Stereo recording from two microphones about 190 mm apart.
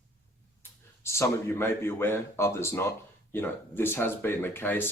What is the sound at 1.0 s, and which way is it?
Speech, 15° left (ahead or behind).